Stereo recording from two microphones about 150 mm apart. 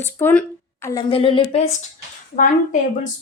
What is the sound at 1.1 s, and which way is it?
Speech, 35° left (ahead or behind).